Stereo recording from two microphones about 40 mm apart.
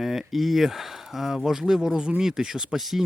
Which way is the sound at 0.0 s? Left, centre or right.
Centre.